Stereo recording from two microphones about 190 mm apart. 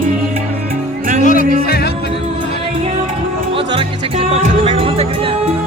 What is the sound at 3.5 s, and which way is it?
Music, 30° right (ahead or behind).